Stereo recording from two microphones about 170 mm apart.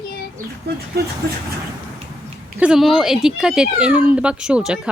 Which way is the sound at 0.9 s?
70° right (ahead or behind).